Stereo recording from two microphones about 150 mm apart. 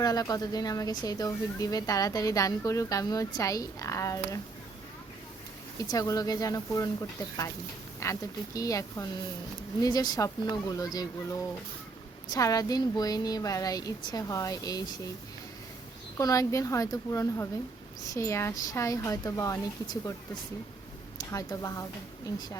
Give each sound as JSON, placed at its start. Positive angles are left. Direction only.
{"t": 0.0, "sound": "speech", "side_deg": 25}
{"t": 5.9, "sound": "speech", "side_deg": 25}
{"t": 7.9, "sound": "speech", "side_deg": 20}
{"t": 16.1, "sound": "speech", "side_deg": 20}
{"t": 21.2, "sound": "speech", "side_deg": 25}